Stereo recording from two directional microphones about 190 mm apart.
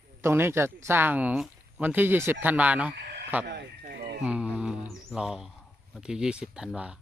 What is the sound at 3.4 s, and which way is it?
Chicken, 60° right (ahead or behind).